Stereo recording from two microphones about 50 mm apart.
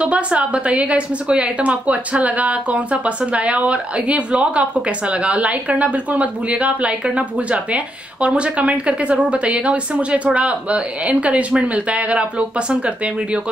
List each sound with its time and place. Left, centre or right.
0.0 s a woman's voice: right